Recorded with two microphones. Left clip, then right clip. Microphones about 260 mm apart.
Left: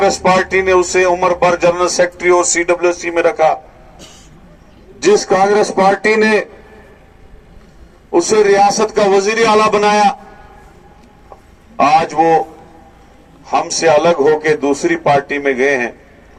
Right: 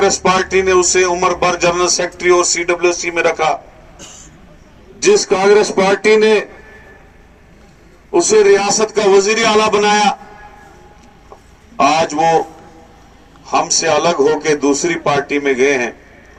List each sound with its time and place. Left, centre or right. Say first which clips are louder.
0.0 s speech: left 1 dB; left
4.9 s speech: left 1 dB; left
8.1 s speech: right 1 dB; left
11.8 s speech: left 2 dB; left
13.4 s speech: left 1 dB; left